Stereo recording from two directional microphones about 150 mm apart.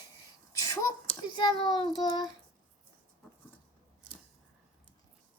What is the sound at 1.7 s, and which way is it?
Speech, 30° left (ahead or behind).